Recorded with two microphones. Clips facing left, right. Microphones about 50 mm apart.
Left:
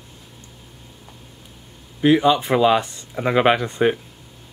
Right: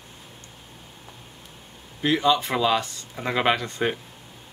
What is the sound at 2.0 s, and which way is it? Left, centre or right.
Speech, centre.